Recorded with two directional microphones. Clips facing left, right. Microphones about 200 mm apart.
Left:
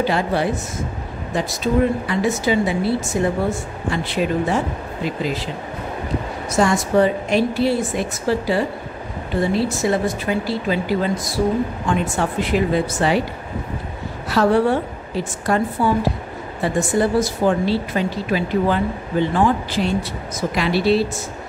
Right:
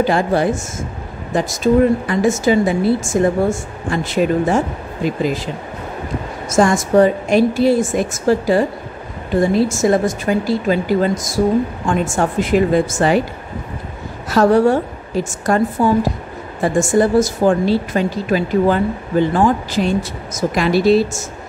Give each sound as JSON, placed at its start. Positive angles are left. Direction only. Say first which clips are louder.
{"t": 0.0, "sound": "speech", "louder": "right 4 dB", "side_deg": -45}
{"t": 6.5, "sound": "speech", "louder": "right 4 dB", "side_deg": -50}
{"t": 14.3, "sound": "speech", "louder": "right 4 dB", "side_deg": -45}